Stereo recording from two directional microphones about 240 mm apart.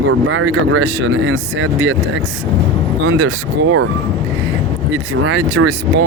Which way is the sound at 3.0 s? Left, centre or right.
Right.